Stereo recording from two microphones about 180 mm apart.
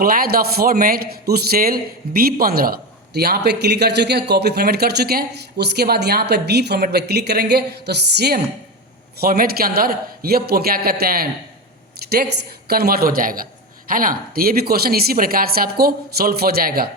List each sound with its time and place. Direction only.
0.0 s a man's voice: 55° right (ahead or behind)